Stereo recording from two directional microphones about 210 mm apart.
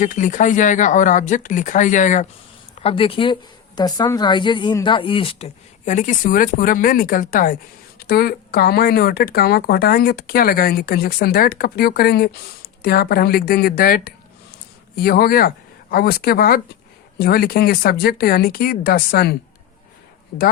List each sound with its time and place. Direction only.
0.0 s speech: 40° left (ahead or behind)
2.8 s a woman's voice: 25° left (ahead or behind); by 19.4 s 50° left (ahead or behind)